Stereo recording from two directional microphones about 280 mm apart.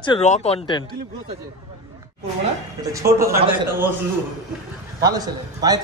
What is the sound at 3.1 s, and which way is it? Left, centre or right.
Speech, centre.